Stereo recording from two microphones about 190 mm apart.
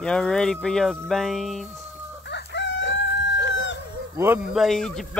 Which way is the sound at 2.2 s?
65° left (ahead or behind).